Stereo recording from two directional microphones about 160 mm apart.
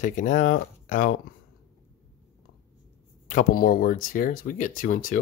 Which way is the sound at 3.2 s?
60° left (ahead or behind).